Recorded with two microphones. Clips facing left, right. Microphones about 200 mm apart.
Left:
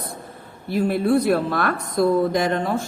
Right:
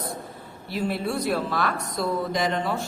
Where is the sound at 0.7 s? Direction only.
50° left (ahead or behind).